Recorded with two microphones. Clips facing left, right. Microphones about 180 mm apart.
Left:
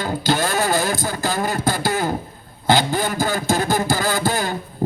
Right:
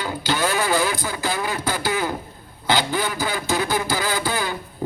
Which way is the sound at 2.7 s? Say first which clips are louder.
Left 4 dB; 45° left (ahead or behind).